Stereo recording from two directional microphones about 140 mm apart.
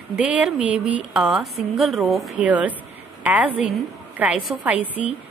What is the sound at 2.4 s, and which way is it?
A woman's voice, 10° right (ahead or behind).